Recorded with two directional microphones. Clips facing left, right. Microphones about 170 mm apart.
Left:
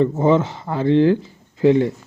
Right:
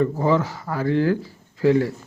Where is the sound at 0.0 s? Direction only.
25° left (ahead or behind).